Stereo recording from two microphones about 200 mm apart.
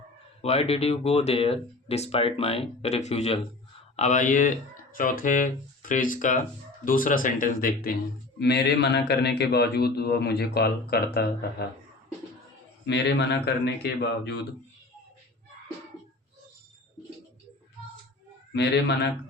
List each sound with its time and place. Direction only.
0.4 s speech: 30° left (ahead or behind); by 7.9 s 45° left (ahead or behind)
8.4 s a man's voice: 55° left (ahead or behind)
12.8 s a man's voice: 60° left (ahead or behind)
18.5 s a man's voice: 55° left (ahead or behind)